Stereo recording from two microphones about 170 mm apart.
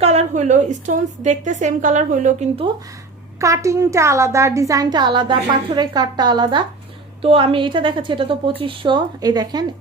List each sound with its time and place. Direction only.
0.0 s a woman's voice: 40° right (ahead or behind)
3.3 s a child's voice: 20° right (ahead or behind)